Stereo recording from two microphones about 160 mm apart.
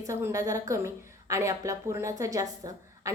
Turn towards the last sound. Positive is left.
turn(degrees=-20)  # may be behind; listen again after turning